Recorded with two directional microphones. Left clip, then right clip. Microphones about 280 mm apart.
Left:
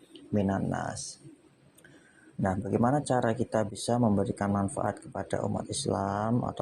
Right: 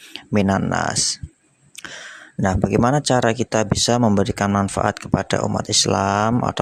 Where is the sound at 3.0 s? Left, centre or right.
Right.